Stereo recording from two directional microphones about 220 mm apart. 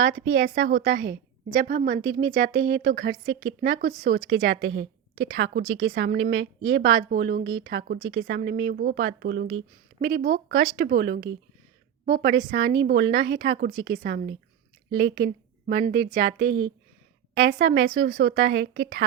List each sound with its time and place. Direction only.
0.3 s a woman's voice: 60° right (ahead or behind)
0.8 s a woman's voice: 45° right (ahead or behind); by 7.6 s 60° right (ahead or behind)
7.6 s a woman's voice: 45° right (ahead or behind)